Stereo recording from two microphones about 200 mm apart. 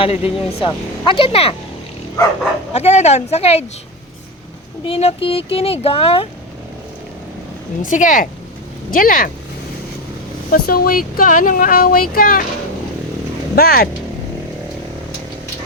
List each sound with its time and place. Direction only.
0.0 s speech: 30° left (ahead or behind)
2.7 s a woman's voice: 30° left (ahead or behind)
4.9 s speech: 30° left (ahead or behind)
7.8 s a woman's voice: 40° left (ahead or behind)
10.5 s speech: 45° left (ahead or behind)
13.6 s speech: 50° left (ahead or behind)